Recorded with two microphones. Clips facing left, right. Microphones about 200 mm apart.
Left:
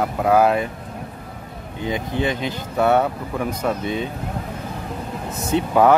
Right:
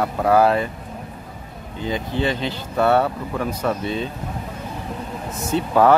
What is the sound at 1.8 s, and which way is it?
Speech, 15° left (ahead or behind).